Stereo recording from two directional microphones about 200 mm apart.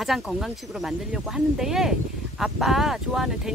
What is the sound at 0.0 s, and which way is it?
Speech, centre (ahead or behind).